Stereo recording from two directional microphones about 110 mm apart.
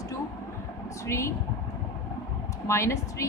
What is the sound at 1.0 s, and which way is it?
Speech, 25° left (ahead or behind).